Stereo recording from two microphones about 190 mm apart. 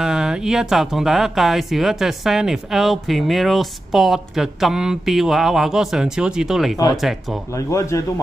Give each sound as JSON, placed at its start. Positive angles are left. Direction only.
{"t": 0.0, "sound": "speech", "side_deg": -5}
{"t": 7.5, "sound": "a man's voice", "side_deg": 15}